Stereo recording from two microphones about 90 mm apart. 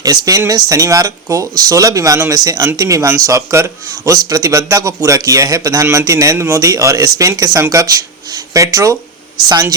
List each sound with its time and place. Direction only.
0.0 s a woman's voice: 45° right (ahead or behind)